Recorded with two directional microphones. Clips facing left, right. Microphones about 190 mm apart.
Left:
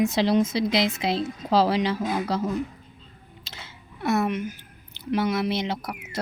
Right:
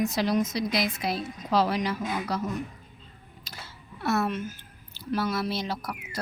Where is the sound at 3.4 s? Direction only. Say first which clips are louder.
Even; 20° left (ahead or behind).